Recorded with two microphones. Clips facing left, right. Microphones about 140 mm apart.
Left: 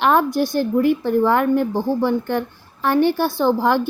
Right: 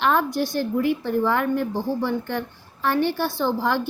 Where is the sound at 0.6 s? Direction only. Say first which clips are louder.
Left 6 dB; 45° left (ahead or behind).